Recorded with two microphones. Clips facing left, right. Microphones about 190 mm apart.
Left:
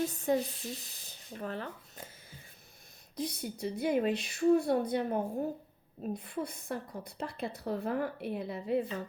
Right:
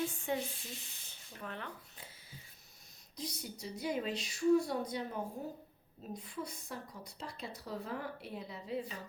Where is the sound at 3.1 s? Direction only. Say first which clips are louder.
Left 7 dB; 55° left (ahead or behind).